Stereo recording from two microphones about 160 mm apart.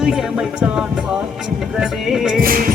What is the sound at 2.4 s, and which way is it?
Music, 65° right (ahead or behind).